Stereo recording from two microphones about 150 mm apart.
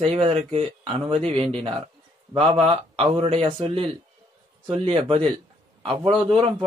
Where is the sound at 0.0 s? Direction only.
40° right (ahead or behind).